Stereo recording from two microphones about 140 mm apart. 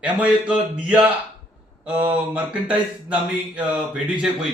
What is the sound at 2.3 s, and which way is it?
A man's voice, 10° right (ahead or behind).